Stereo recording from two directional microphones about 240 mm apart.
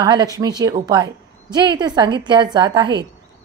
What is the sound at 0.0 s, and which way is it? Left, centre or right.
A woman's voice, centre.